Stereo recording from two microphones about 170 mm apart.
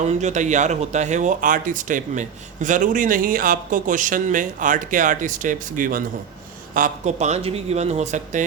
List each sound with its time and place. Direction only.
0.0 s speech: 45° right (ahead or behind)